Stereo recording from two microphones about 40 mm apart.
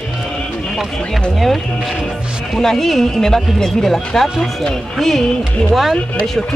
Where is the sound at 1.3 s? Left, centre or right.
Centre.